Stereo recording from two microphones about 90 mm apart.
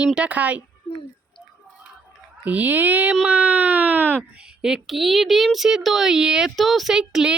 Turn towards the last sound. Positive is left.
turn(degrees=-5)  # may be behind; listen again after turning